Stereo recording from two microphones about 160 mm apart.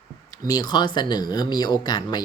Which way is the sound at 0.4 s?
25° left (ahead or behind).